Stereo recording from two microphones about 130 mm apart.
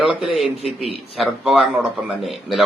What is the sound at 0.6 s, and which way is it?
Speech, 50° left (ahead or behind).